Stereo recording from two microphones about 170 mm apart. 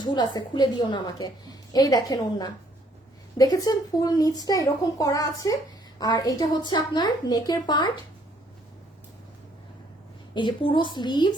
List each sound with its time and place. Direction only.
0.0 s a woman's voice: 25° left (ahead or behind)
10.3 s a woman's voice: 30° left (ahead or behind)